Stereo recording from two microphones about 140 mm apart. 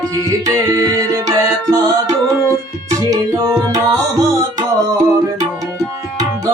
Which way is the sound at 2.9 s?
25° right (ahead or behind).